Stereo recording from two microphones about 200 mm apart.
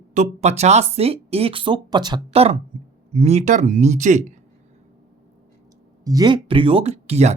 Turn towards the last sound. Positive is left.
turn(degrees=-30)  # may be behind; listen again after turning